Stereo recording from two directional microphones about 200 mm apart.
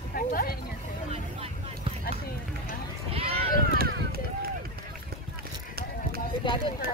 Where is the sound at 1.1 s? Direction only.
30° right (ahead or behind).